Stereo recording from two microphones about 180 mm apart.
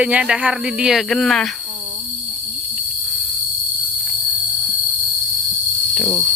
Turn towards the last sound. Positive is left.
turn(degrees=5)  # may be behind; listen again after turning